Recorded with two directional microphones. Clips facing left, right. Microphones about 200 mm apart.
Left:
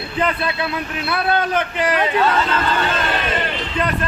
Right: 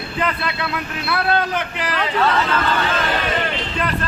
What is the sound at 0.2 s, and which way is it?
Speech, 25° left (ahead or behind).